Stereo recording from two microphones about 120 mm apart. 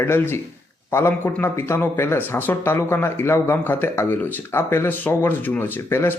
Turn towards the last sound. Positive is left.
turn(degrees=20)  # may be behind; listen again after turning